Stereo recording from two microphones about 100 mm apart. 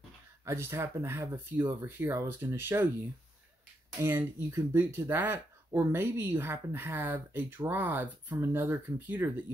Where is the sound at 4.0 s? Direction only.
25° right (ahead or behind).